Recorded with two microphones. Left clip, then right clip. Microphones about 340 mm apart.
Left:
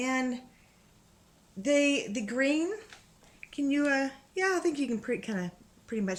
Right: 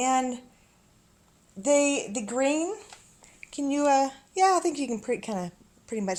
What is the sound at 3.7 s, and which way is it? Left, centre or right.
A woman's voice, centre.